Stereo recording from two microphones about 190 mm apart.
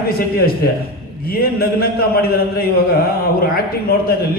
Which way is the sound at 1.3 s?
55° left (ahead or behind).